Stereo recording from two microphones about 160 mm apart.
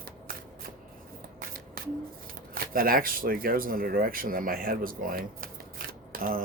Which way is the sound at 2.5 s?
65° right (ahead or behind).